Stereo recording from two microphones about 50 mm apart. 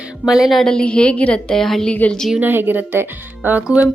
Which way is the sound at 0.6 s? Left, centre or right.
Centre.